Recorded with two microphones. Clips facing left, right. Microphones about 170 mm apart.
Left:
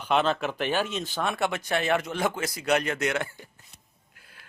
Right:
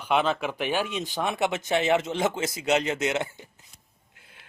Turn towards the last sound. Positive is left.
turn(degrees=-20)  # may be behind; listen again after turning